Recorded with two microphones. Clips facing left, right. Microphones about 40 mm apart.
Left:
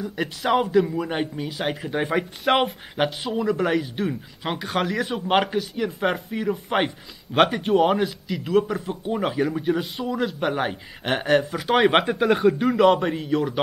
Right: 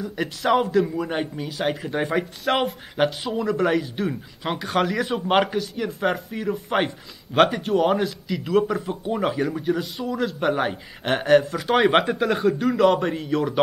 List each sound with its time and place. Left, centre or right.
0.0 s a man's voice: centre
2.4 s speech: left
3.0 s a man's voice: centre